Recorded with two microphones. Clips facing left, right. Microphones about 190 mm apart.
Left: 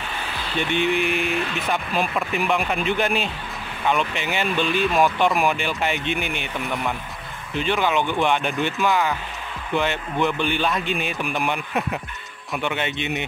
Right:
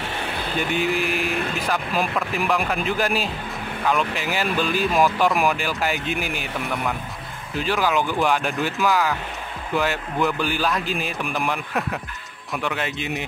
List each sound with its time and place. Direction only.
0.6 s speech: 5° right (ahead or behind)